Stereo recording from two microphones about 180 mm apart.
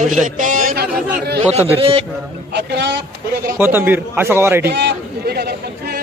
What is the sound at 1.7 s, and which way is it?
Speech, 30° right (ahead or behind).